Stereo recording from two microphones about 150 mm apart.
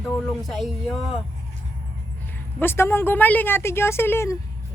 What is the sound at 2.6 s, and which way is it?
Speech, 15° left (ahead or behind).